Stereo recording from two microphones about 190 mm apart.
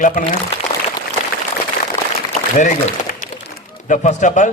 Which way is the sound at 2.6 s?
40° left (ahead or behind).